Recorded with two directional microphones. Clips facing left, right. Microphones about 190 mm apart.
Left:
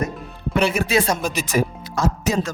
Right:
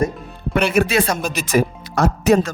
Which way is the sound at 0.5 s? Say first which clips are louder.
Right 2 dB; 60° right (ahead or behind).